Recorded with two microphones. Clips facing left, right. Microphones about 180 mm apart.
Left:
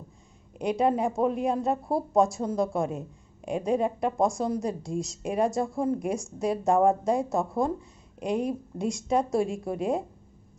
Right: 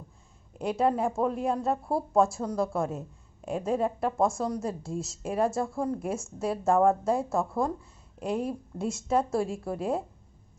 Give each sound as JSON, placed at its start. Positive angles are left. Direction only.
{"t": 0.7, "sound": "speech", "side_deg": 15}
{"t": 4.9, "sound": "a woman's voice", "side_deg": 0}
{"t": 5.2, "sound": "speech", "side_deg": 15}
{"t": 8.8, "sound": "a woman's voice", "side_deg": -5}
{"t": 9.0, "sound": "speech", "side_deg": 15}